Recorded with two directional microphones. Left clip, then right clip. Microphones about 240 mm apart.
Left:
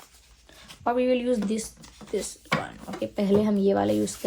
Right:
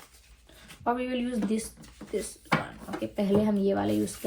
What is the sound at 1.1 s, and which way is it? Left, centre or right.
A woman's voice, left.